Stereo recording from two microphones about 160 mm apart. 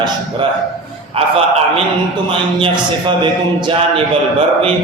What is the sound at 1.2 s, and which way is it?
Speech, 35° right (ahead or behind).